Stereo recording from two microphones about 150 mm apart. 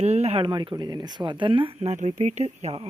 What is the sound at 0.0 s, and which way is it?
Speech, 45° right (ahead or behind).